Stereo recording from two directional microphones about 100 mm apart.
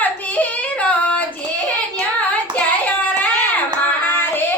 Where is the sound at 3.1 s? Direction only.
20° left (ahead or behind).